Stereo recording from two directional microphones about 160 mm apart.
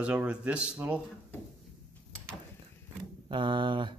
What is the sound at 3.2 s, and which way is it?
Speech, 30° right (ahead or behind).